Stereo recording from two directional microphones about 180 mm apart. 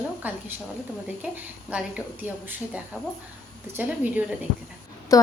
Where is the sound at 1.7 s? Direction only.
5° right (ahead or behind).